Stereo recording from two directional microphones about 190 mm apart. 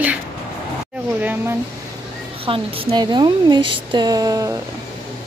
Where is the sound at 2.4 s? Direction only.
30° right (ahead or behind).